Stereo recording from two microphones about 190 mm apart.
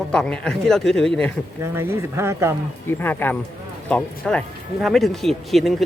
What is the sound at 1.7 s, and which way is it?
Speech, 15° right (ahead or behind).